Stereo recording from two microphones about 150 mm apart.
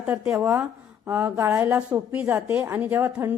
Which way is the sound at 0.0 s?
10° right (ahead or behind).